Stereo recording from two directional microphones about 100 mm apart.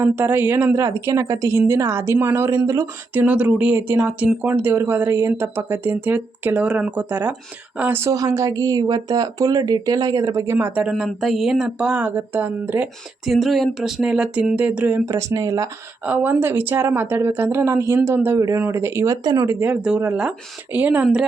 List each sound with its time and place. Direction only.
0.0 s speech: 20° right (ahead or behind)
3.2 s speech: 15° right (ahead or behind)
8.1 s speech: 35° right (ahead or behind)
10.8 s speech: 10° right (ahead or behind)
13.2 s speech: centre (ahead or behind); by 15.0 s 15° right (ahead or behind)
15.0 s speech: 30° right (ahead or behind)
16.0 s speech: 20° right (ahead or behind)
19.2 s speech: 45° right (ahead or behind)
19.5 s speech: 20° right (ahead or behind)